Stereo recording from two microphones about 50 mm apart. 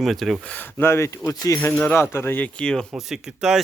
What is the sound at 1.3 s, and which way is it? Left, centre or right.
Speech, left.